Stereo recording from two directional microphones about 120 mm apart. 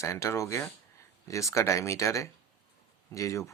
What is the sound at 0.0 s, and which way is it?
Speech, 25° left (ahead or behind).